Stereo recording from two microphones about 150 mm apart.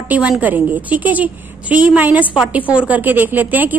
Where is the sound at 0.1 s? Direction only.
10° right (ahead or behind).